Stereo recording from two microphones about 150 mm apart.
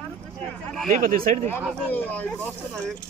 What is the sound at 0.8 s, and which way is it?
Speech, 65° right (ahead or behind).